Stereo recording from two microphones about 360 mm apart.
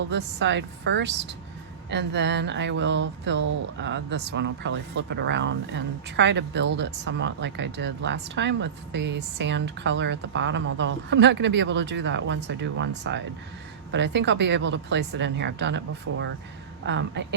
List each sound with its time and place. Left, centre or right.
0.1 s speech: right